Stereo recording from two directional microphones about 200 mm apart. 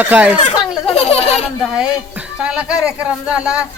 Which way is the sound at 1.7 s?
5° right (ahead or behind).